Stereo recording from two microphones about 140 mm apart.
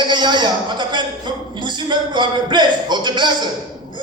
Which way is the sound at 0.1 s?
30° right (ahead or behind).